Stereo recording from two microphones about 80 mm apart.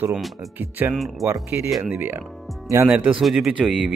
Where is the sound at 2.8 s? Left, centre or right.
Centre.